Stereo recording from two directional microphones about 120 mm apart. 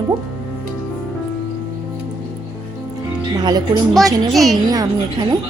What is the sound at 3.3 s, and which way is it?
Music, 35° right (ahead or behind).